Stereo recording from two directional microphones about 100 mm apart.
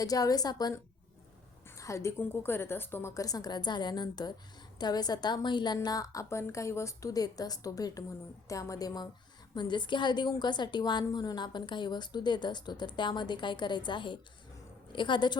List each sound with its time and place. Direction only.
0.0 s a woman's voice: 40° left (ahead or behind)
1.8 s a woman's voice: 30° left (ahead or behind)
2.1 s speech: 20° left (ahead or behind)
3.2 s a woman's voice: 40° left (ahead or behind)
9.6 s a woman's voice: 50° left (ahead or behind)